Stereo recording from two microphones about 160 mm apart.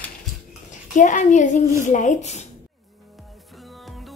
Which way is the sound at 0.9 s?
50° left (ahead or behind).